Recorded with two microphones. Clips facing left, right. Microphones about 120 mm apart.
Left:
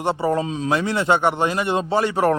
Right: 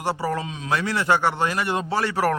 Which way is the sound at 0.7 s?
25° left (ahead or behind).